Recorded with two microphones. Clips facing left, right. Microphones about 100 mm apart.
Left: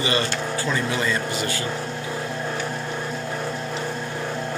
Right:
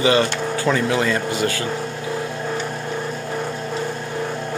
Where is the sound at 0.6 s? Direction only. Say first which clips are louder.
Right 7 dB; 75° right (ahead or behind).